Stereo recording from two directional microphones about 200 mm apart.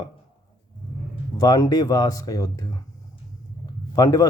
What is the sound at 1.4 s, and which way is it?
Speech, 20° left (ahead or behind).